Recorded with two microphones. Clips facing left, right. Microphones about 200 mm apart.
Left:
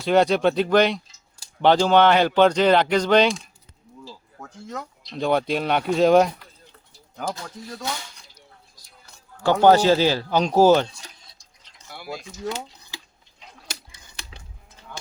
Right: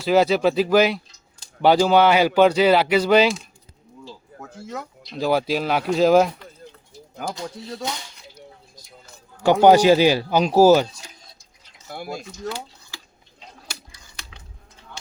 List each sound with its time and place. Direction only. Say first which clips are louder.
0.0 s speech: right 1 dB; 5° right (ahead or behind)
9.4 s speech: right 2 dB; 15° right (ahead or behind)
11.9 s speech: right 3 dB; 50° right (ahead or behind)
12.5 s dishes: left 2 dB; 20° left (ahead or behind)